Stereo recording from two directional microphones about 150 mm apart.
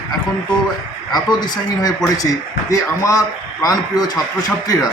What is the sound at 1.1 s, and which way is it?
A man's voice, 30° left (ahead or behind).